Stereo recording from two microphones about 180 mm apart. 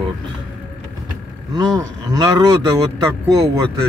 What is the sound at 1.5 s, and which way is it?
Speech, 20° right (ahead or behind).